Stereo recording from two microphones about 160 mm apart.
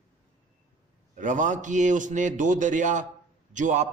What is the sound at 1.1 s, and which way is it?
A man's voice, 50° right (ahead or behind).